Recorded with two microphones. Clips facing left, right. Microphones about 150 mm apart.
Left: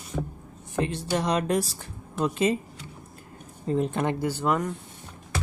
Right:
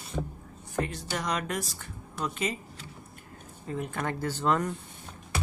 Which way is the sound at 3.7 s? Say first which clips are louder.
Left 7 dB; 25° left (ahead or behind).